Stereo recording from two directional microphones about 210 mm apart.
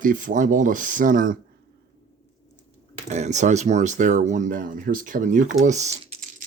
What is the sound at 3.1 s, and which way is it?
Speech, 35° right (ahead or behind).